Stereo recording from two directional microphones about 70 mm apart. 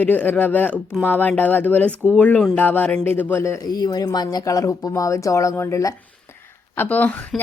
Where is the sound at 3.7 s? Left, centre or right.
Left.